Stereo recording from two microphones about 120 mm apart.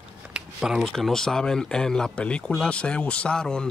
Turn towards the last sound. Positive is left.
turn(degrees=5)  # may be behind; listen again after turning